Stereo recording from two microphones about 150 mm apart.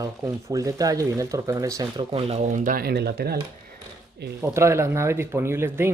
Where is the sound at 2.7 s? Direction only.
90° right.